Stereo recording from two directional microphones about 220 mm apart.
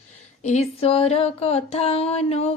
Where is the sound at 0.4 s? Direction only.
30° left (ahead or behind).